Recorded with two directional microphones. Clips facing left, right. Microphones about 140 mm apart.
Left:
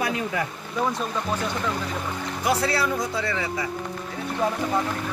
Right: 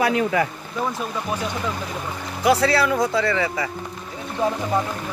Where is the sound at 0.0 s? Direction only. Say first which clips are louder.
Right 6 dB; 90° right.